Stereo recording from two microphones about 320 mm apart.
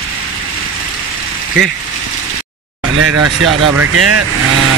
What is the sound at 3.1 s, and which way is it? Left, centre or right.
Speech, right.